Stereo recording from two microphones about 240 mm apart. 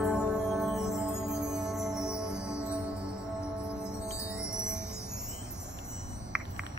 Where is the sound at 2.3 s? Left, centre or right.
Centre.